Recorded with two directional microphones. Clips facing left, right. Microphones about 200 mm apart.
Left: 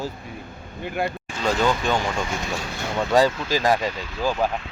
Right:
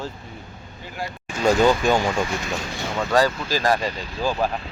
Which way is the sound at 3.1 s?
20° left (ahead or behind).